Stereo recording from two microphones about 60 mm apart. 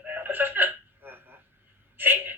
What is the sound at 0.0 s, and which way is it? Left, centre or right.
Telephone, right.